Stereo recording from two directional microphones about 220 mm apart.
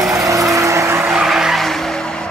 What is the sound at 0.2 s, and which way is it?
Vehicle, 15° right (ahead or behind).